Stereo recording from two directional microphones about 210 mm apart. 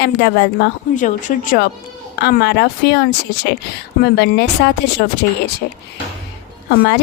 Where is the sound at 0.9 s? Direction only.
35° left (ahead or behind).